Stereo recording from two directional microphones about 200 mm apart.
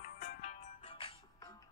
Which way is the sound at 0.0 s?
40° left (ahead or behind).